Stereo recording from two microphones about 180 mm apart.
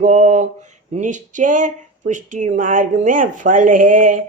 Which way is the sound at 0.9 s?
45° right (ahead or behind).